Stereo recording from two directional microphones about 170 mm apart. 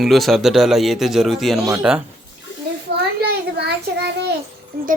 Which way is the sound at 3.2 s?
70° right (ahead or behind).